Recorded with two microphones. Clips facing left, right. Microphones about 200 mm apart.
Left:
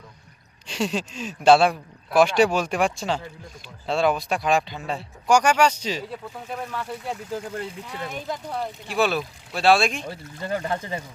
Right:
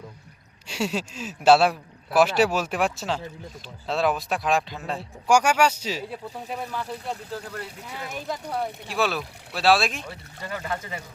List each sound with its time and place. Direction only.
0.7 s speech: 10° right (ahead or behind)
7.3 s speech: 25° left (ahead or behind)
7.9 s speech: 5° right (ahead or behind)
10.1 s speech: 35° left (ahead or behind)